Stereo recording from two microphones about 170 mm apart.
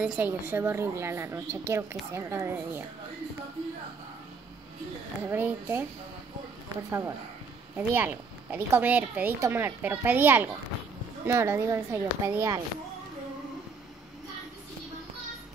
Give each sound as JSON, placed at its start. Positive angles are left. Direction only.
{"t": 0.0, "sound": "a woman's voice", "side_deg": -10}
{"t": 5.2, "sound": "a woman's voice", "side_deg": -10}
{"t": 6.9, "sound": "a woman's voice", "side_deg": -15}